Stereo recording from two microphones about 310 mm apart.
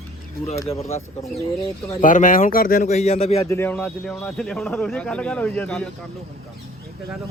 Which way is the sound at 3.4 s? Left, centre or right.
Centre.